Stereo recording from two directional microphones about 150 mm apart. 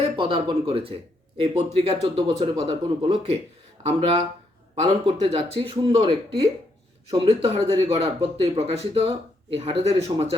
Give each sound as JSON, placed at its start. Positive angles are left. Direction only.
{"t": 0.0, "sound": "speech", "side_deg": -35}
{"t": 4.7, "sound": "speech", "side_deg": -35}